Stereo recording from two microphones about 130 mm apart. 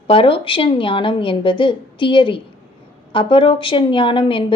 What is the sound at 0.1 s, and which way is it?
Speech, 45° left (ahead or behind).